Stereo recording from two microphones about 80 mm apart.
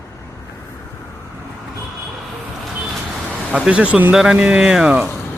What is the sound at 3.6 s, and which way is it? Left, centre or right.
Speech, centre.